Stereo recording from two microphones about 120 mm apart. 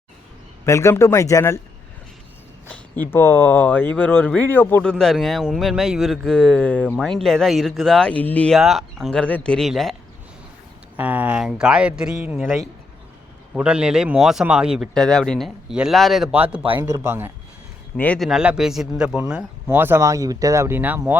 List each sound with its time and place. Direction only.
0.6 s a man's voice: 25° left (ahead or behind)
2.6 s speech: 10° left (ahead or behind)
8.5 s a man's voice: centre (ahead or behind)
10.9 s speech: 15° right (ahead or behind)
12.4 s a man's voice: centre (ahead or behind)
16.3 s speech: 15° right (ahead or behind)
16.7 s speech: 25° right (ahead or behind)
17.9 s a man's voice: 10° left (ahead or behind)
18.2 s speech: 5° right (ahead or behind)